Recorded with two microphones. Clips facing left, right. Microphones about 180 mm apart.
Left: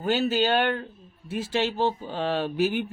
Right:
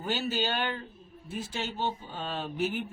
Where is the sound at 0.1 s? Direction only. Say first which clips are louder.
Left 8 dB; 90° left.